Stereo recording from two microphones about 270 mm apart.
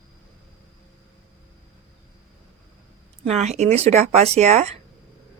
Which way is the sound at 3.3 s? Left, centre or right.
Right.